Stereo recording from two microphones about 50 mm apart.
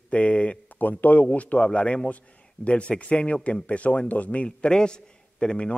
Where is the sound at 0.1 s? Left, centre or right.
Left.